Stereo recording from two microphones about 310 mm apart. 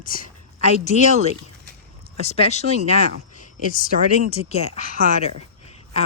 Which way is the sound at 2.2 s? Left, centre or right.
Centre.